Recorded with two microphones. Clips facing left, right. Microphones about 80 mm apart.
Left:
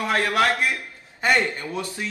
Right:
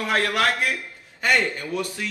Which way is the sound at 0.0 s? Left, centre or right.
Left.